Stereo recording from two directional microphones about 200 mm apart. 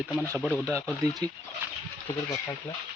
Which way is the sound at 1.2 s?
20° right (ahead or behind).